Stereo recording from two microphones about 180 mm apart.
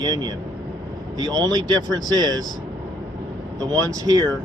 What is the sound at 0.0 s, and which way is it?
Speech, 20° right (ahead or behind).